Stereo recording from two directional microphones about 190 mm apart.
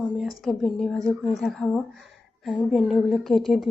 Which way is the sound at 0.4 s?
Centre (ahead or behind).